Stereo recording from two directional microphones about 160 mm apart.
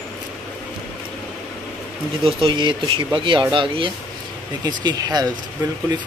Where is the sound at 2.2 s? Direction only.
30° right (ahead or behind).